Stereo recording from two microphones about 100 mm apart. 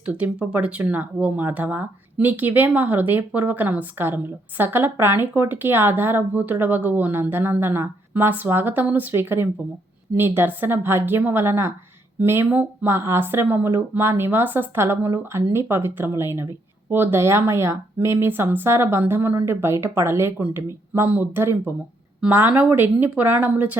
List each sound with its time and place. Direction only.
0.0 s speech: 10° right (ahead or behind)